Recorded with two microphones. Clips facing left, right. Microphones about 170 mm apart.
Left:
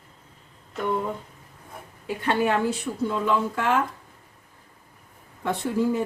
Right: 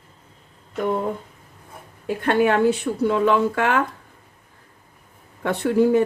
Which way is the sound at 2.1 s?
60° right (ahead or behind).